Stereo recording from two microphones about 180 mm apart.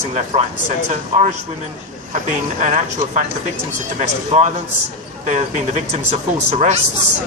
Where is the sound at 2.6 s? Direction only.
40° right (ahead or behind).